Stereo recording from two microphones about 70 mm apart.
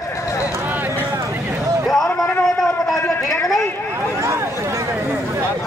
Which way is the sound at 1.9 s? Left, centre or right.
Centre.